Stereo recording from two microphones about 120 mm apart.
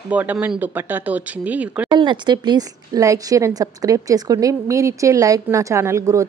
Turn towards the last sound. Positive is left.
turn(degrees=-25)  # may be behind; listen again after turning